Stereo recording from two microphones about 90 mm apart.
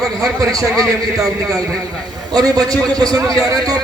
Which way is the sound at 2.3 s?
45° right (ahead or behind).